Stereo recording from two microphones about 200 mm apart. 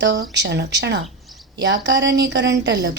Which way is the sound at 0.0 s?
60° right (ahead or behind).